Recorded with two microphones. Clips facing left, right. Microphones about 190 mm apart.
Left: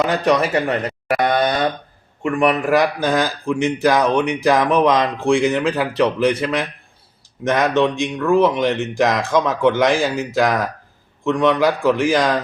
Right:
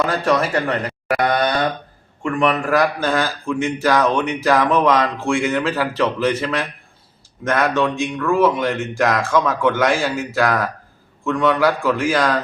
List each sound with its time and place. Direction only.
0.3 s speech: 20° left (ahead or behind)